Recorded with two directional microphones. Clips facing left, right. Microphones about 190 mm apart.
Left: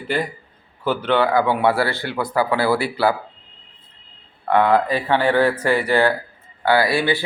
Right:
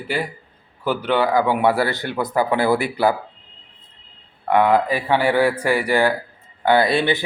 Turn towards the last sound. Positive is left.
turn(degrees=-20)  # may be behind; listen again after turning